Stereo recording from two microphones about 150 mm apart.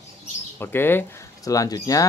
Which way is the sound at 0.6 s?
15° left (ahead or behind).